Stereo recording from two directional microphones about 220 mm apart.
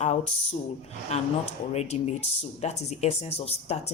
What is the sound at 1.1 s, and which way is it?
Speech, 30° left (ahead or behind).